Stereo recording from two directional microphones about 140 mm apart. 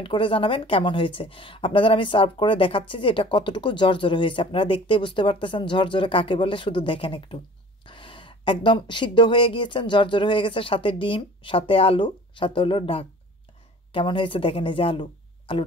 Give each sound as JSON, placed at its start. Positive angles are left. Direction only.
{"t": 0.0, "sound": "a woman's voice", "side_deg": 40}